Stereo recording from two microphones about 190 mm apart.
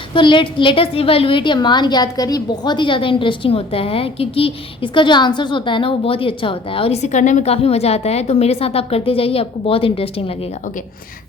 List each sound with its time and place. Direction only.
0.1 s a woman's voice: 25° left (ahead or behind)